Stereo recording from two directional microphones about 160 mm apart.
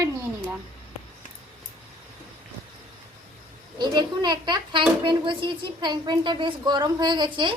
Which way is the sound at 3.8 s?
25° right (ahead or behind).